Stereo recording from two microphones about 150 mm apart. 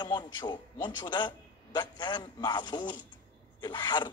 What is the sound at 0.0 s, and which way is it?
A man's voice, 30° left (ahead or behind).